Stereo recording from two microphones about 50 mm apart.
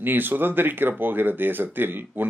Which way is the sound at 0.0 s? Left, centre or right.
Right.